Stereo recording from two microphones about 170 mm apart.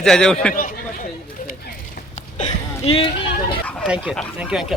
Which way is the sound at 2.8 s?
35° left (ahead or behind).